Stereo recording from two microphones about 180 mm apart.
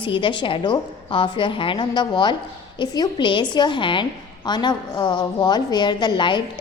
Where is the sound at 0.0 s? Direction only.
25° left (ahead or behind).